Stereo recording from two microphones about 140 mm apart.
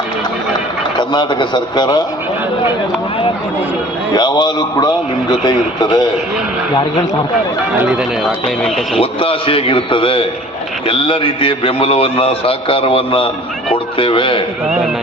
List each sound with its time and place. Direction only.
0.9 s a man's voice: 30° left (ahead or behind)
4.1 s a man's voice: 30° left (ahead or behind)
9.0 s a man's voice: 40° left (ahead or behind)